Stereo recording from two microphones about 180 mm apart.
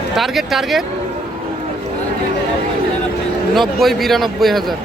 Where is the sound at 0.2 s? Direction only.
Centre (ahead or behind).